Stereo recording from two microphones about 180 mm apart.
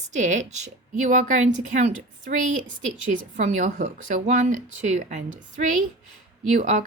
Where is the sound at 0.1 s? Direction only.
40° right (ahead or behind).